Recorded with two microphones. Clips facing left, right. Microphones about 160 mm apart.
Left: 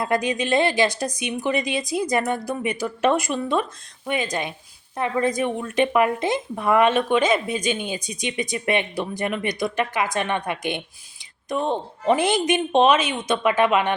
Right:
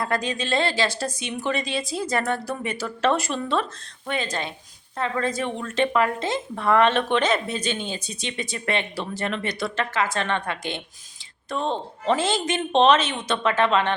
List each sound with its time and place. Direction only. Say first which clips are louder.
0.0 s speech: left 3 dB; 15° left (ahead or behind)